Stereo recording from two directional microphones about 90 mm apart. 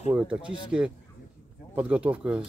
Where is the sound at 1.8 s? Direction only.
15° right (ahead or behind).